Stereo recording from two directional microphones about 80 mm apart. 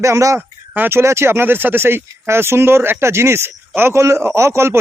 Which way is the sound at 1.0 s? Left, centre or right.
Right.